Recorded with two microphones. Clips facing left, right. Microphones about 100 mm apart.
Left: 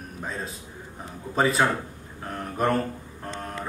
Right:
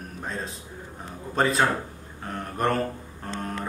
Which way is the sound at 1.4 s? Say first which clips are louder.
Even; centre (ahead or behind).